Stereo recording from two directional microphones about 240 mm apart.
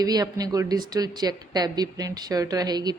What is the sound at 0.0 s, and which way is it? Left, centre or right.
Speech, centre.